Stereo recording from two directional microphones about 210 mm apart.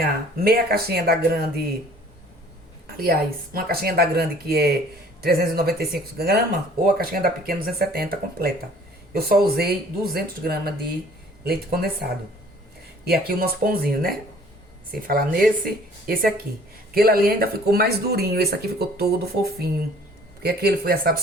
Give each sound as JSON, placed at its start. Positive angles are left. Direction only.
{"t": 0.0, "sound": "speech", "side_deg": -45}
{"t": 3.0, "sound": "speech", "side_deg": -45}
{"t": 13.2, "sound": "speech", "side_deg": -45}